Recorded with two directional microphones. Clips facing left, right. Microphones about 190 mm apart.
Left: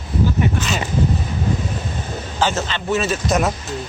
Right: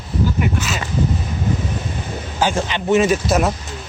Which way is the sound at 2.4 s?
10° right (ahead or behind).